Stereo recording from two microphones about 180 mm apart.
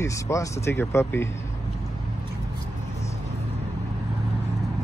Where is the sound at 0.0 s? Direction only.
15° left (ahead or behind).